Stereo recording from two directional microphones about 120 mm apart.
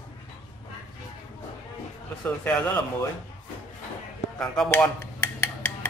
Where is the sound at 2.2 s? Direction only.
15° left (ahead or behind).